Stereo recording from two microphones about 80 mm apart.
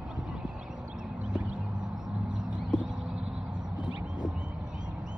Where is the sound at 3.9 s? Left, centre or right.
Right.